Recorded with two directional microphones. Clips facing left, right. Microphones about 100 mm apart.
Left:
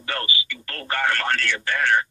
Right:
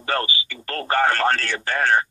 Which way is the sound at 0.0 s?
35° right (ahead or behind).